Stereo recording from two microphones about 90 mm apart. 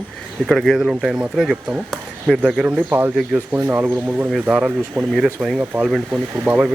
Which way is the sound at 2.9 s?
25° right (ahead or behind).